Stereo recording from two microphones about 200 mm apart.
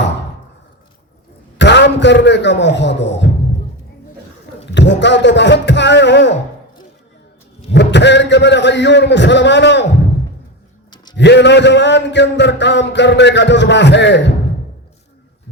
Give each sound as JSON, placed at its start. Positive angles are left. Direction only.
{"t": 1.5, "sound": "a man's voice", "side_deg": 60}
{"t": 4.7, "sound": "a man's voice", "side_deg": 60}
{"t": 7.7, "sound": "a man's voice", "side_deg": 60}
{"t": 11.2, "sound": "a man's voice", "side_deg": 60}